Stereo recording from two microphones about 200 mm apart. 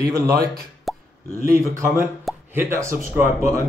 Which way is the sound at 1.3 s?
15° right (ahead or behind).